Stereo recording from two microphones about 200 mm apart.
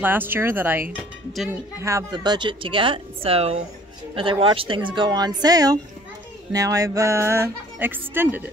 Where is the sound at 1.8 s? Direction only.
15° right (ahead or behind).